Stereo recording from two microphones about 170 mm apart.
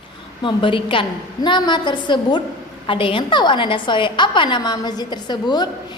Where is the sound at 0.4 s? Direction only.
30° left (ahead or behind).